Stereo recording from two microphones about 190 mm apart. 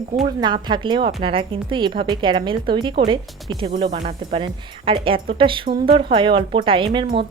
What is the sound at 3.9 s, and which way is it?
Speech, 40° right (ahead or behind).